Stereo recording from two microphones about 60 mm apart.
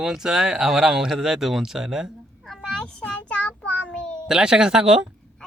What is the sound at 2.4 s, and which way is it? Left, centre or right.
Child singing, centre.